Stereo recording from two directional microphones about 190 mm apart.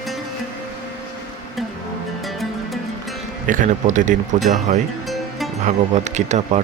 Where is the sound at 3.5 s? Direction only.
45° right (ahead or behind).